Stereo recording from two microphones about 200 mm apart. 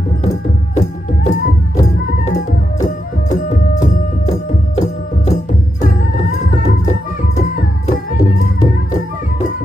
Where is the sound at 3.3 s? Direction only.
35° left (ahead or behind).